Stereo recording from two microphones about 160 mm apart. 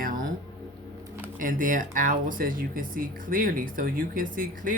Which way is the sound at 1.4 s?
55° right (ahead or behind).